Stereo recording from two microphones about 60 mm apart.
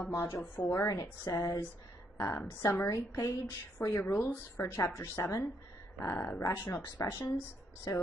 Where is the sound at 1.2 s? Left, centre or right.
Left.